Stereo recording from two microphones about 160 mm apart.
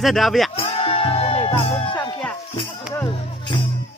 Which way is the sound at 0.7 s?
35° left (ahead or behind).